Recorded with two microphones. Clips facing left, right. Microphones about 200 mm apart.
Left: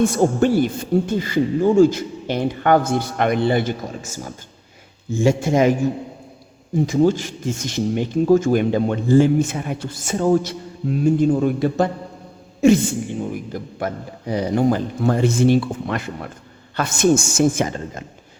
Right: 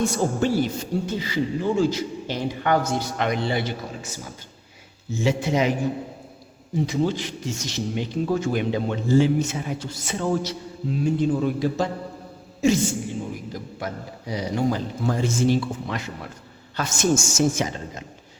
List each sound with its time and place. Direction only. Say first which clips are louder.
0.0 s speech: left 6 dB; 55° left (ahead or behind)
6.7 s speech: left 7 dB; 50° left (ahead or behind)